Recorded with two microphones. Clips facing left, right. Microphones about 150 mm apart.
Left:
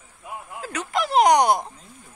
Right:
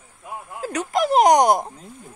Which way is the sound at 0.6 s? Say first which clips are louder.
Right 5 dB; 40° right (ahead or behind).